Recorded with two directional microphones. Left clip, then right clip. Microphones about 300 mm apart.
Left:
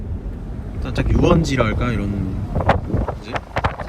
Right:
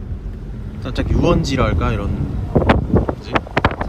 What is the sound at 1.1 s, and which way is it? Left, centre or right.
Speech, right.